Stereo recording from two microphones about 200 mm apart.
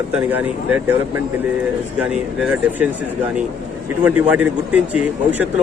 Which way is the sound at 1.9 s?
5° right (ahead or behind).